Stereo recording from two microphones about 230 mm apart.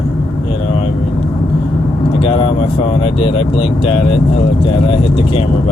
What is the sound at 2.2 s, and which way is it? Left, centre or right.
Speech, left.